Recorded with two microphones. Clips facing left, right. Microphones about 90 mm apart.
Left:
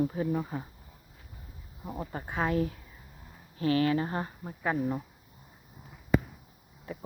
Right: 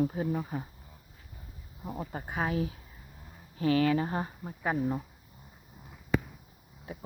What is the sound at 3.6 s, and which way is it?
Speech, 25° right (ahead or behind).